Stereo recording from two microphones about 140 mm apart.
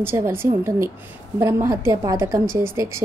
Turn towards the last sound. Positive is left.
turn(degrees=-20)  # may be behind; listen again after turning